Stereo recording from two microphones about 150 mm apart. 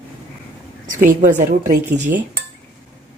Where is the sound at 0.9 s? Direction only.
65° right (ahead or behind).